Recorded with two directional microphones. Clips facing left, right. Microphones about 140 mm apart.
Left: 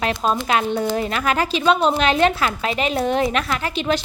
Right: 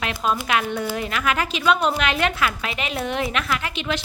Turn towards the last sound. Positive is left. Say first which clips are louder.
# left 4 dB
turn(degrees=35)  # may be behind; listen again after turning